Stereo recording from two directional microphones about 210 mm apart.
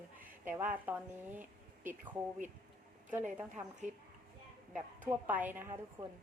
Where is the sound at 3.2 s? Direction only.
35° right (ahead or behind).